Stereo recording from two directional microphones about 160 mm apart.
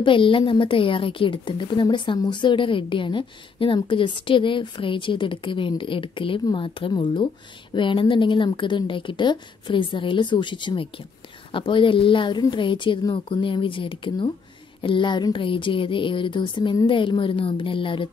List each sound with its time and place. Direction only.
0.0 s a woman's voice: 30° left (ahead or behind)